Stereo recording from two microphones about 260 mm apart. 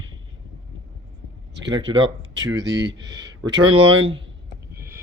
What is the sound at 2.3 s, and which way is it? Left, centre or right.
Speech, right.